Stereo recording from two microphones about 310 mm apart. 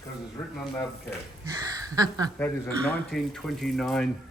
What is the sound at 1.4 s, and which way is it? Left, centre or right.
Speech, centre.